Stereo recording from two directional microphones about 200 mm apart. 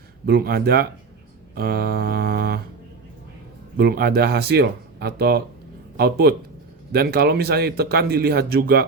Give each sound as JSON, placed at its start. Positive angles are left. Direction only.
{"t": 0.3, "sound": "speech", "side_deg": -50}
{"t": 3.8, "sound": "speech", "side_deg": -50}